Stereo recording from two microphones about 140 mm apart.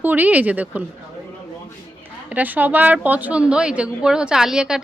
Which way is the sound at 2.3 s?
10° right (ahead or behind).